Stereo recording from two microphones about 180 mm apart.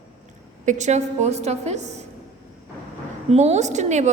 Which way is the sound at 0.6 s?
40° right (ahead or behind).